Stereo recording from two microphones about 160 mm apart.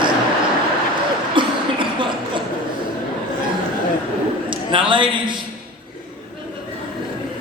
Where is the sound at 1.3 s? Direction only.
30° right (ahead or behind).